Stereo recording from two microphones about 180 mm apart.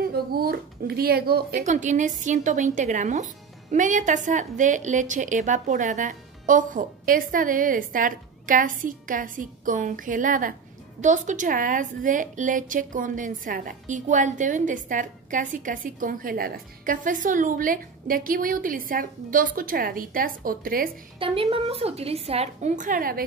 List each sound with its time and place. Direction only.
0.0 s speech: 55° right (ahead or behind)
1.6 s a woman's voice: 40° right (ahead or behind)
21.2 s a woman's voice: 30° right (ahead or behind); by 23.2 s 55° right (ahead or behind)